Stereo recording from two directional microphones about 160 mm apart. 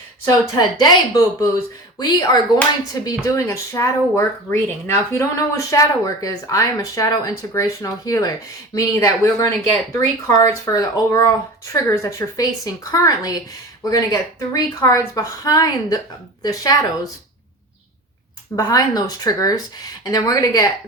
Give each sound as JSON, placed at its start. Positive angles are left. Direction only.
{"t": 0.3, "sound": "speech", "side_deg": 25}
{"t": 18.5, "sound": "speech", "side_deg": 25}